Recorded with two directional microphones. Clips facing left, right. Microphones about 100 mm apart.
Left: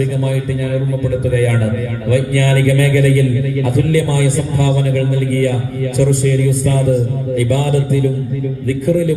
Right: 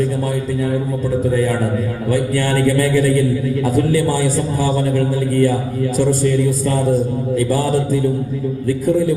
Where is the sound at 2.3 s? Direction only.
30° right (ahead or behind).